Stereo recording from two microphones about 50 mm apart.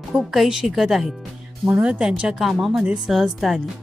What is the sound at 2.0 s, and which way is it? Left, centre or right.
A woman's voice, centre.